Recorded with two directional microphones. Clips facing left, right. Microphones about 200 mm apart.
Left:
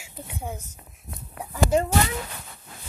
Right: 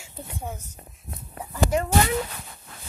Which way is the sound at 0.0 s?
10° left (ahead or behind).